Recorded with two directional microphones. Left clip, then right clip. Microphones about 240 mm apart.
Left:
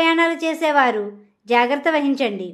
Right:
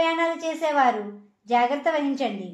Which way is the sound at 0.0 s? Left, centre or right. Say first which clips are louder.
Left 6 dB; left.